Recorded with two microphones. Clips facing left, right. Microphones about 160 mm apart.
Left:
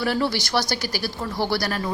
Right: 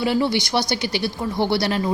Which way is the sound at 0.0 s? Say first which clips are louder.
Right 3 dB; 20° right (ahead or behind).